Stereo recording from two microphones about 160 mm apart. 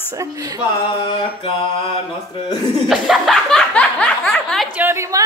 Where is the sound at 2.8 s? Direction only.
Centre (ahead or behind).